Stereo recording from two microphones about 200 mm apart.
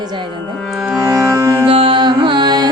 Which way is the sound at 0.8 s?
10° right (ahead or behind).